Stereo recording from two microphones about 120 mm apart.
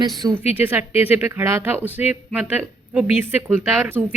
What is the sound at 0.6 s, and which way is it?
A woman's voice, 15° right (ahead or behind).